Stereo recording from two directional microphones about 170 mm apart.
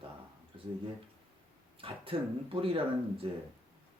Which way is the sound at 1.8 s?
30° right (ahead or behind).